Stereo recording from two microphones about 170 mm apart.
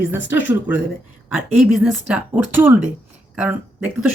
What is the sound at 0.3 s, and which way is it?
Speech, 90° left.